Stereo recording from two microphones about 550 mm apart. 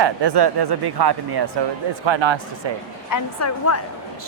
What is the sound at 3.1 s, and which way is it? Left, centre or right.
Speech, left.